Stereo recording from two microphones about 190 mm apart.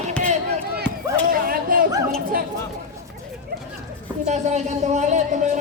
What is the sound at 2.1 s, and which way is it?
Chatter, 50° right (ahead or behind).